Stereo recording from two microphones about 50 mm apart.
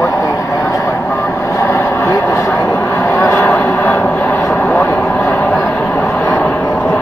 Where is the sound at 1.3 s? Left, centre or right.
Left.